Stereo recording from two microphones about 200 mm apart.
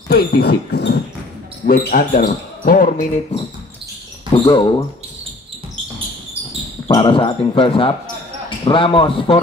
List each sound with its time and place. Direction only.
0.1 s speech: 50° left (ahead or behind)
1.7 s speech: 45° left (ahead or behind)
4.3 s speech: 25° left (ahead or behind)
6.9 s speech: 25° left (ahead or behind)